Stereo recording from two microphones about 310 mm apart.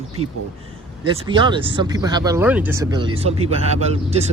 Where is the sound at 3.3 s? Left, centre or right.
Right.